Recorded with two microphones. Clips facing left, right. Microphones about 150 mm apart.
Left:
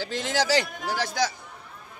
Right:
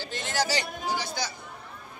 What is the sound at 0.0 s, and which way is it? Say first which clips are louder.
A man's voice: left 3 dB; 90° left.